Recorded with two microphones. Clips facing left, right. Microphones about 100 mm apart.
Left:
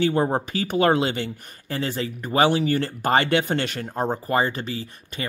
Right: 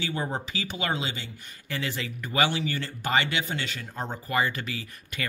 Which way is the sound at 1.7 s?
35° left (ahead or behind).